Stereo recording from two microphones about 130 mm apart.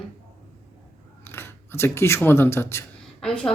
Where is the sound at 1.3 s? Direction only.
20° left (ahead or behind).